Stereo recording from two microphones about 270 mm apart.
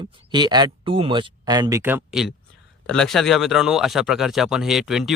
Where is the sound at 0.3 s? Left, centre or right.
Centre.